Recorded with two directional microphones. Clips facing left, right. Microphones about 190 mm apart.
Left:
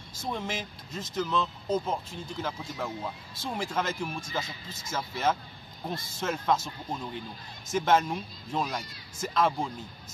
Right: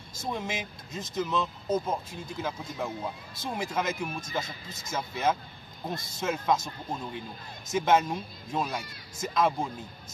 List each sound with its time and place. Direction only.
0.2 s speech: 10° right (ahead or behind)